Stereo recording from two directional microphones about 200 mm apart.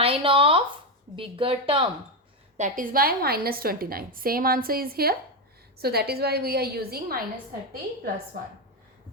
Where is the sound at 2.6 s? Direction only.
45° right (ahead or behind).